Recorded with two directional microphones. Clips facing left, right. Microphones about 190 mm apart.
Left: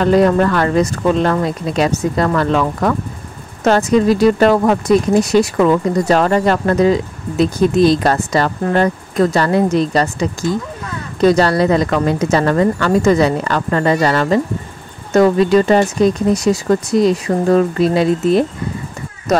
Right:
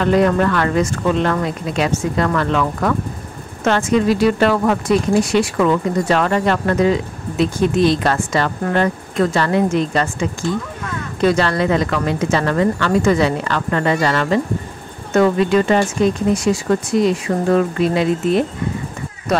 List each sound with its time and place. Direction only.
0.0 s speech: 35° left (ahead or behind)